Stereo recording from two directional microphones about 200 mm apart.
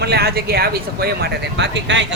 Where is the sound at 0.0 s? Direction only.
55° right (ahead or behind).